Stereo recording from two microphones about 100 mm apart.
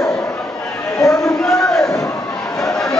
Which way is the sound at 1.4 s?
5° left (ahead or behind).